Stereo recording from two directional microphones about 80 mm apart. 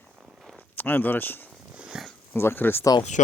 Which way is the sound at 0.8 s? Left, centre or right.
Left.